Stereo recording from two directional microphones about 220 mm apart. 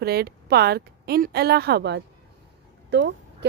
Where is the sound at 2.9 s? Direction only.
55° right (ahead or behind).